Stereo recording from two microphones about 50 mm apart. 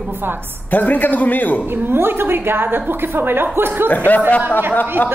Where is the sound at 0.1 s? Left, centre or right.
Right.